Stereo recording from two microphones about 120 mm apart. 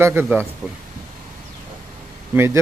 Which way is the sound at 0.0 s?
20° right (ahead or behind).